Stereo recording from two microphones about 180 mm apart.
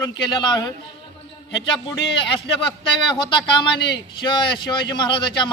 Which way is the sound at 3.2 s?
25° left (ahead or behind).